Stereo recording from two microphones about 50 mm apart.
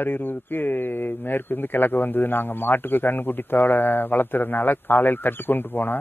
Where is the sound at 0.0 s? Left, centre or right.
Left.